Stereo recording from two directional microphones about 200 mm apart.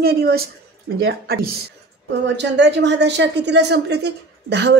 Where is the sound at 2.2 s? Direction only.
60° right (ahead or behind).